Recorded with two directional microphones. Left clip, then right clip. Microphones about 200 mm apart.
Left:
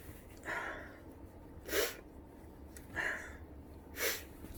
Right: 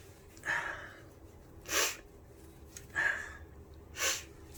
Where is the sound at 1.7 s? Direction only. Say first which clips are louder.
Right 3 dB; 30° left (ahead or behind).